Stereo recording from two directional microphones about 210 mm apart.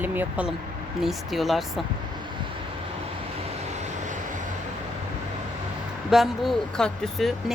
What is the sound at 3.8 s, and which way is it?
Vehicle, 35° right (ahead or behind).